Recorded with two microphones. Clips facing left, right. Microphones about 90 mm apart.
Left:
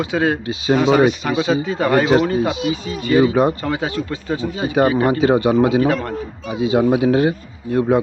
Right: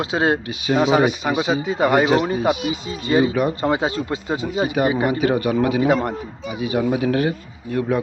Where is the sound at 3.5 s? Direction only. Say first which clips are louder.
Right 2 dB; 20° right (ahead or behind).